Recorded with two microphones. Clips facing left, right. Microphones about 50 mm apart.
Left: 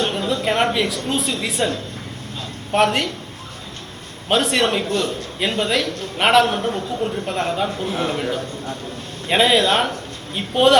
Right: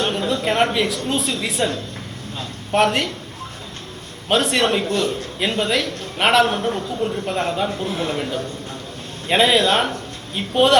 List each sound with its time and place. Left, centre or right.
0.1 s a sound: centre
0.4 s speech: centre
2.7 s speech: centre
4.3 s speech: centre
4.9 s a man's voice: right
5.4 s speech: centre
7.9 s a man's voice: left
9.3 s speech: centre